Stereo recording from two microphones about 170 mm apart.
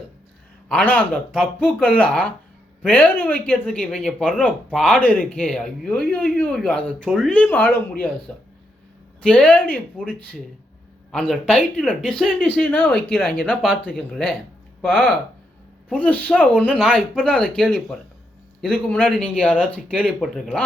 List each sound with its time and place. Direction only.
0.7 s speech: 10° left (ahead or behind)